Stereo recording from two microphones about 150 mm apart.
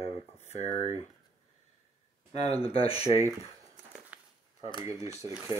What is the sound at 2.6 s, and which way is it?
Speech, 40° left (ahead or behind).